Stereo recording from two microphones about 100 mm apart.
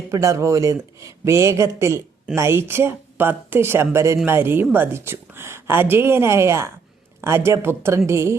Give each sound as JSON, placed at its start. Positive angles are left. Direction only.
{"t": 0.1, "sound": "a woman's voice", "side_deg": -30}